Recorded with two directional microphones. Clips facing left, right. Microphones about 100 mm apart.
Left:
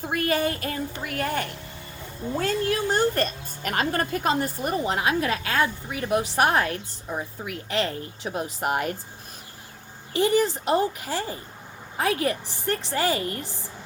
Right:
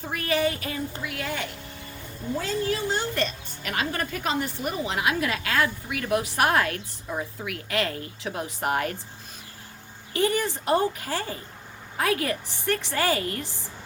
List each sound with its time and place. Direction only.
0.1 s a woman's voice: 45° left (ahead or behind); by 9.0 s 25° left (ahead or behind)
10.2 s a woman's voice: 25° left (ahead or behind)